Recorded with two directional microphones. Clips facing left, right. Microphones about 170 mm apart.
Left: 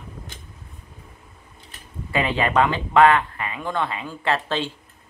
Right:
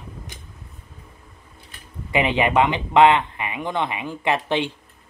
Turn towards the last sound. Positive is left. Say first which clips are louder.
# right 2 dB
turn(degrees=-15)  # may be behind; listen again after turning